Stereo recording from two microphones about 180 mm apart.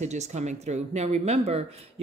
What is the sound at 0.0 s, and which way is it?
Speech, 40° right (ahead or behind).